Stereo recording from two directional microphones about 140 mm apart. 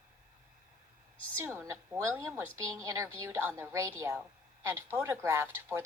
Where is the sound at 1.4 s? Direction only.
20° right (ahead or behind).